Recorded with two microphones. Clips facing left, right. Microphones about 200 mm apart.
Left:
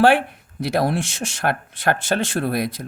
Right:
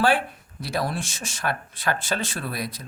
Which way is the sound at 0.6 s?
60° left (ahead or behind).